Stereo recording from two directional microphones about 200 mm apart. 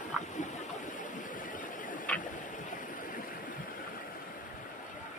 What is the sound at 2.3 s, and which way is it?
Stream, 40° left (ahead or behind).